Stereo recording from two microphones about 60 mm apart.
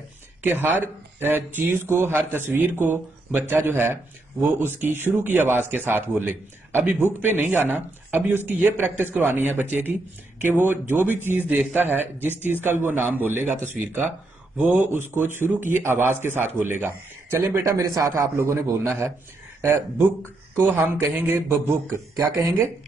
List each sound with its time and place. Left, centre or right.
0.4 s speech: right
14.6 s speech: right
17.6 s speech: right
17.8 s speech: right
18.1 s a man's voice: right
20.5 s a man's voice: right